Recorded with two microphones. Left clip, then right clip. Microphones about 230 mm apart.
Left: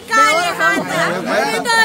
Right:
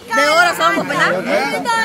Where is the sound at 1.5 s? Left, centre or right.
Left.